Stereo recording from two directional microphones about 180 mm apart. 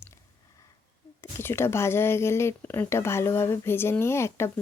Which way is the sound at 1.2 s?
15° left (ahead or behind).